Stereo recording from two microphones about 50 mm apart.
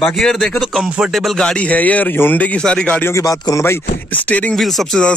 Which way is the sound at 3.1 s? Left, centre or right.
Left.